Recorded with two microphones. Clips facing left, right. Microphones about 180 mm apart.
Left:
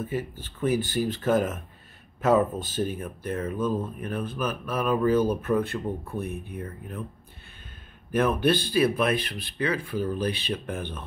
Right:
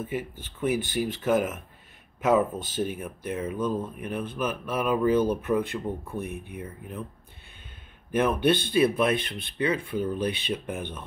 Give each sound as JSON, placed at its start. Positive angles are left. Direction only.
{"t": 0.0, "sound": "speech", "side_deg": -15}
{"t": 8.1, "sound": "speech", "side_deg": -20}